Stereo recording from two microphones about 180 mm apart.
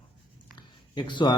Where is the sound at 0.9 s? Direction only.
25° left (ahead or behind).